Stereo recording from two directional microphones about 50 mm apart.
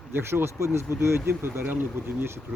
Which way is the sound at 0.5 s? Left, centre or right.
Right.